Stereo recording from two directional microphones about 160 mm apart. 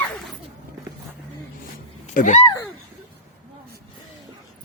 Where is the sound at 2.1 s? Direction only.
50° left (ahead or behind).